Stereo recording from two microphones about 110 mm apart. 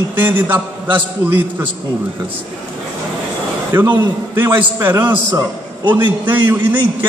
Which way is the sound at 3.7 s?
20° right (ahead or behind).